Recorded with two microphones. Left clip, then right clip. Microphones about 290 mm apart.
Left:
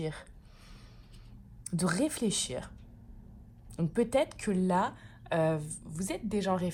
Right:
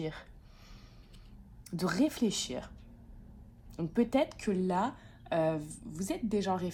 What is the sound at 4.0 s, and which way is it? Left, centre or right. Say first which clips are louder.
A woman's voice: left 2 dB; left.